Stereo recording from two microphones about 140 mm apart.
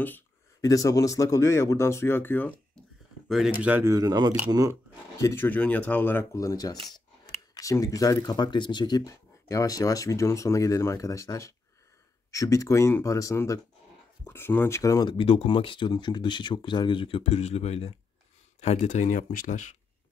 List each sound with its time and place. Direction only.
0.6 s speech: 25° left (ahead or behind)
3.3 s speech: centre (ahead or behind)
3.6 s speech: 15° right (ahead or behind)
3.9 s speech: 25° right (ahead or behind)
5.1 s speech: 20° left (ahead or behind); by 17.2 s 35° left (ahead or behind)
17.2 s speech: 50° left (ahead or behind); by 19.7 s 65° left (ahead or behind)